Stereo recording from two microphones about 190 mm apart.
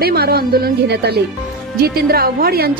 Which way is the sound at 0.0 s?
55° right (ahead or behind).